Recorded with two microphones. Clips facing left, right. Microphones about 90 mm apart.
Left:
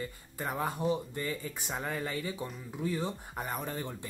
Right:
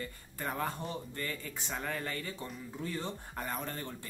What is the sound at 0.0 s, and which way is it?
Speech, 10° left (ahead or behind).